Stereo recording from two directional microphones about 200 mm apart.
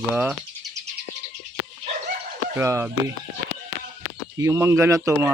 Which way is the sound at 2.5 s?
15° right (ahead or behind).